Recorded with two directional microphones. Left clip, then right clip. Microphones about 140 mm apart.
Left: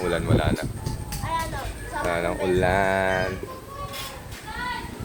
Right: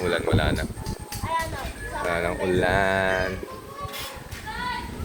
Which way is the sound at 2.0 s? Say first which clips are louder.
Left 1 dB; 20° left (ahead or behind).